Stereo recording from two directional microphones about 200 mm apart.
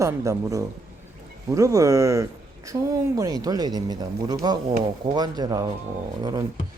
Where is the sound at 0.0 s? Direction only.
15° right (ahead or behind).